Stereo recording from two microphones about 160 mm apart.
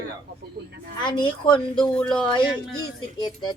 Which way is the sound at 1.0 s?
30° left (ahead or behind).